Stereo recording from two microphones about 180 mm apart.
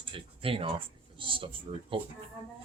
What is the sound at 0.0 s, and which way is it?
Speech, 30° right (ahead or behind).